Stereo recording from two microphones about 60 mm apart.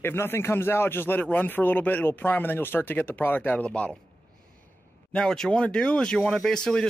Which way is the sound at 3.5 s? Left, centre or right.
Centre.